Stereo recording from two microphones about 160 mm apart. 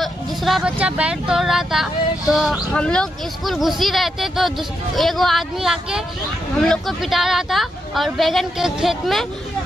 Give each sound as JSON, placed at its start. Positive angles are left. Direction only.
{"t": 0.0, "sound": "speech", "side_deg": 0}